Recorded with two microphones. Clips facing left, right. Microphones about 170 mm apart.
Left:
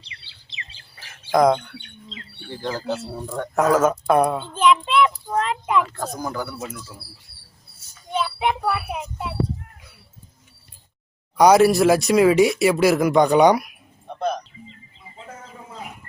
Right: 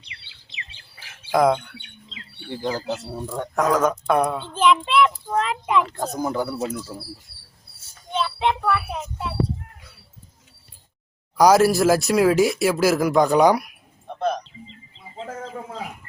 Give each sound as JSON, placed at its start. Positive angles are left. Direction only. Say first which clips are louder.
{"t": 0.9, "sound": "bird", "louder": "left 2 dB", "side_deg": -5}
{"t": 2.5, "sound": "speech", "louder": "right 1 dB", "side_deg": -15}
{"t": 3.5, "sound": "speech", "louder": "left 2 dB", "side_deg": 5}
{"t": 6.1, "sound": "speech", "louder": "right 7 dB", "side_deg": -25}
{"t": 8.1, "sound": "speech", "louder": "even", "side_deg": 10}
{"t": 11.3, "sound": "speech", "louder": "left 2 dB", "side_deg": 0}
{"t": 15.4, "sound": "livestock", "louder": "right 8 dB", "side_deg": -75}